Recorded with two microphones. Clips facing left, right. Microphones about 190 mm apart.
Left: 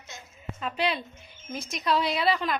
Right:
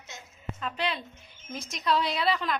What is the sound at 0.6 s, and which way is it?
A woman's voice, 10° left (ahead or behind).